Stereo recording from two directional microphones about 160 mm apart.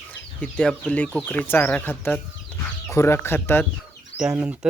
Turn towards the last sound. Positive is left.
turn(degrees=-5)  # may be behind; listen again after turning